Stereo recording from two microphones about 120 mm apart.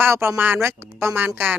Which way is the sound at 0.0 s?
20° right (ahead or behind).